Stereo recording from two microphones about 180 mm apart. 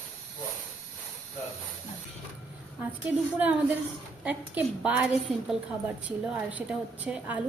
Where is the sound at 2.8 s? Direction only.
10° right (ahead or behind).